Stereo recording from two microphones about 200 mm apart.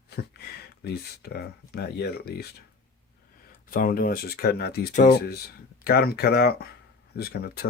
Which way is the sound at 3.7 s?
45° left (ahead or behind).